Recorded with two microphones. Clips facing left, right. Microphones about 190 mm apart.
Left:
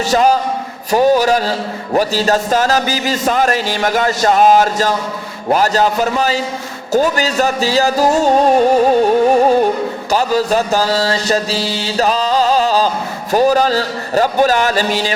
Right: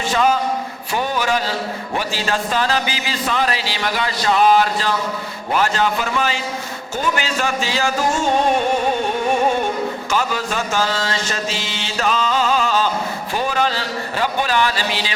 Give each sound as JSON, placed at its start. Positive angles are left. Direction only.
{"t": 0.1, "sound": "mantra", "side_deg": 40}
{"t": 0.9, "sound": "a man's voice", "side_deg": 40}
{"t": 5.5, "sound": "mantra", "side_deg": 40}